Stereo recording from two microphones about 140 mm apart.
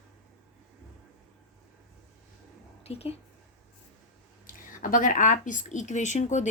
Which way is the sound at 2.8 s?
45° left (ahead or behind).